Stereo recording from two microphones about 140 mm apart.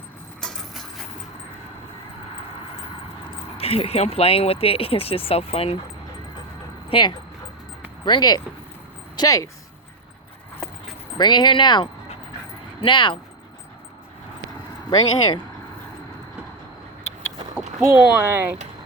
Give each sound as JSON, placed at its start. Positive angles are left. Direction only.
{"t": 0.4, "sound": "clip-clop", "side_deg": 0}
{"t": 3.6, "sound": "speech", "side_deg": 45}
{"t": 8.0, "sound": "speech", "side_deg": 30}
{"t": 11.2, "sound": "speech", "side_deg": 30}
{"t": 14.8, "sound": "speech", "side_deg": 30}
{"t": 17.9, "sound": "speech", "side_deg": -15}